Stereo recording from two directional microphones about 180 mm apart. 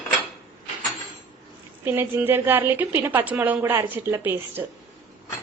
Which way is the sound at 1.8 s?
10° right (ahead or behind).